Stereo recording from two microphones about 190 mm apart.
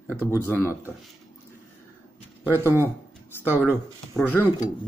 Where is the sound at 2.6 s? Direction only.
15° right (ahead or behind).